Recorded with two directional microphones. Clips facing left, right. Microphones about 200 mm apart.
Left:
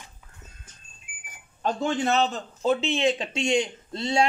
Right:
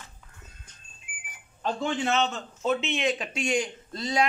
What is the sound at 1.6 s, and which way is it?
A man's voice, 40° left (ahead or behind).